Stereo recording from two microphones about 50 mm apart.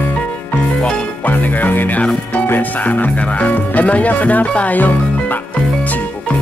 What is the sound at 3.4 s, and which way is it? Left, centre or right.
Music, left.